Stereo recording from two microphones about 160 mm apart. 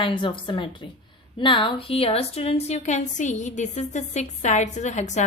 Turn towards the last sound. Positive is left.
turn(degrees=45)  # may be behind; listen again after turning